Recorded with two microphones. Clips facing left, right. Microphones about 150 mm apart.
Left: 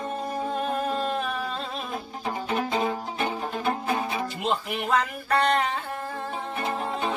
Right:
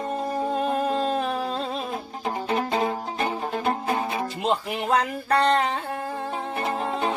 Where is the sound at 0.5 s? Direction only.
25° right (ahead or behind).